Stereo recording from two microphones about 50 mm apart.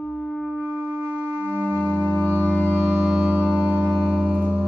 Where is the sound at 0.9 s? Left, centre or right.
Right.